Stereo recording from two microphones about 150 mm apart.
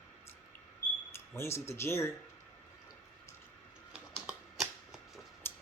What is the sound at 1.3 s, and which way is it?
Speech, 15° left (ahead or behind).